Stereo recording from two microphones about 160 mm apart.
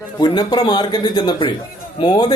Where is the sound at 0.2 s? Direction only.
25° left (ahead or behind).